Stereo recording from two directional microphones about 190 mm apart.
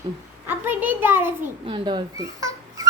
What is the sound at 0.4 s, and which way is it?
A child's voice, 10° right (ahead or behind).